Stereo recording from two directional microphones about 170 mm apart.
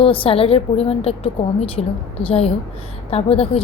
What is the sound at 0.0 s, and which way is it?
A woman's voice, 30° left (ahead or behind).